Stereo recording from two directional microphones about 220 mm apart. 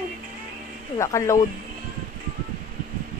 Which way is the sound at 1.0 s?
15° left (ahead or behind).